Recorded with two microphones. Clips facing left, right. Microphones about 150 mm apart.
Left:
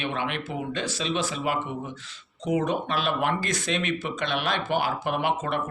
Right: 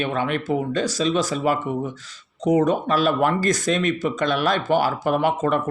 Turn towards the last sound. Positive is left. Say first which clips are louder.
# right 6 dB
turn(degrees=-40)  # may be behind; listen again after turning